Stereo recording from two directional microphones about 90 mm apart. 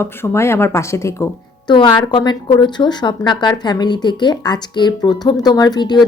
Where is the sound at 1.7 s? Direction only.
60° left (ahead or behind).